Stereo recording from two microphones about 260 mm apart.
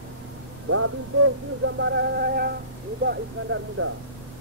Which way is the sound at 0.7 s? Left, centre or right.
Right.